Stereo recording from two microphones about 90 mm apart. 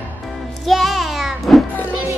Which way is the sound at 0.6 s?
Centre (ahead or behind).